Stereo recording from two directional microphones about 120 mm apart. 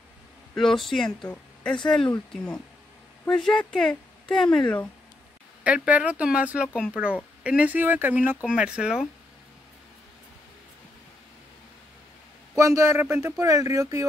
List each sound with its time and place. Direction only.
0.6 s speech: centre (ahead or behind)
5.6 s speech: 10° right (ahead or behind)
12.5 s speech: 25° right (ahead or behind)